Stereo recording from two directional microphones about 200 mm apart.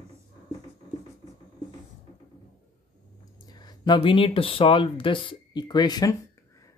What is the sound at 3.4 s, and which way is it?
Speech, 20° left (ahead or behind).